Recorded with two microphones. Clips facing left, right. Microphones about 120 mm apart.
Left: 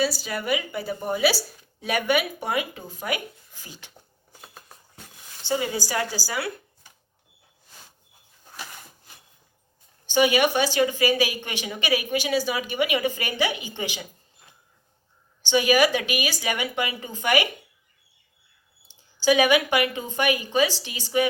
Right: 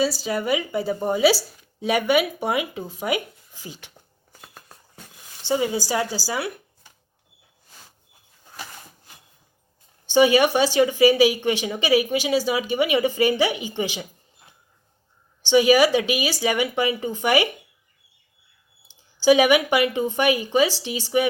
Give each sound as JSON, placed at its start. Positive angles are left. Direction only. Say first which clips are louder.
{"t": 0.2, "sound": "a woman's voice", "louder": "right 4 dB", "side_deg": -25}
{"t": 4.3, "sound": "a sound", "louder": "even", "side_deg": 0}
{"t": 5.4, "sound": "a woman's voice", "louder": "right 4 dB", "side_deg": -25}
{"t": 10.1, "sound": "a woman's voice", "louder": "right 4 dB", "side_deg": -30}
{"t": 15.4, "sound": "a woman's voice", "louder": "right 4 dB", "side_deg": -25}
{"t": 19.2, "sound": "a woman's voice", "louder": "right 3 dB", "side_deg": -25}